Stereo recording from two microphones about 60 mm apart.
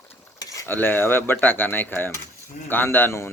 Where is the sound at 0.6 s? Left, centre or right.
Left.